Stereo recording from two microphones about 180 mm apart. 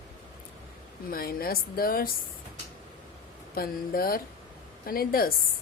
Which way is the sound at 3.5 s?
55° left (ahead or behind).